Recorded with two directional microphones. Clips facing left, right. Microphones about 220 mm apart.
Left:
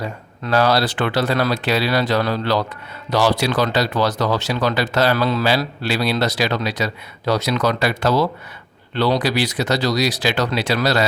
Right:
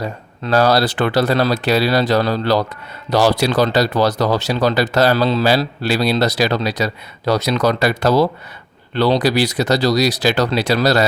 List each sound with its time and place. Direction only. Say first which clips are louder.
0.0 s speech: right 3 dB; 40° right (ahead or behind)